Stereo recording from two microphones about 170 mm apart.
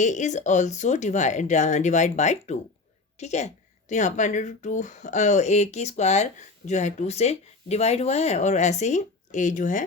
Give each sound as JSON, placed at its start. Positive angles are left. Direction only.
{"t": 0.0, "sound": "speech", "side_deg": 45}